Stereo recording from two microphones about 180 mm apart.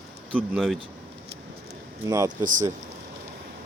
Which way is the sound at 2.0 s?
20° right (ahead or behind).